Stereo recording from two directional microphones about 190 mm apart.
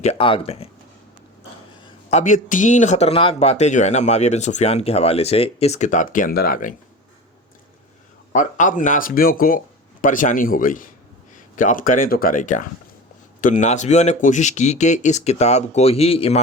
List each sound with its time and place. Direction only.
0.0 s speech: 30° left (ahead or behind)
2.0 s speech: 40° left (ahead or behind)
8.3 s speech: 40° left (ahead or behind)